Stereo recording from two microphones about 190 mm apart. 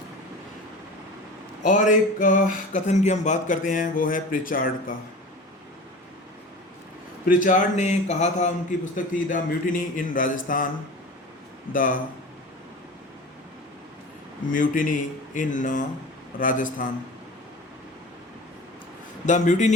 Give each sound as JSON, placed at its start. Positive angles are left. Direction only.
{"t": 1.6, "sound": "a sound", "side_deg": 40}
{"t": 3.7, "sound": "speech", "side_deg": 45}
{"t": 7.3, "sound": "speech", "side_deg": 45}
{"t": 11.7, "sound": "speech", "side_deg": 45}
{"t": 14.5, "sound": "speech", "side_deg": 45}
{"t": 19.2, "sound": "a sound", "side_deg": 40}